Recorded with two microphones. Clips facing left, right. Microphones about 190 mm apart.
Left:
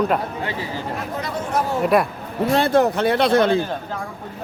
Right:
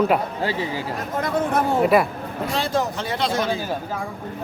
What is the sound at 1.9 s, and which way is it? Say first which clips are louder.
Speech: left 1 dB; centre (ahead or behind).